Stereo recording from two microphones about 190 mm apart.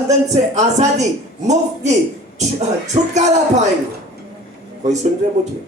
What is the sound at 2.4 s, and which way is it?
Speech, 35° right (ahead or behind).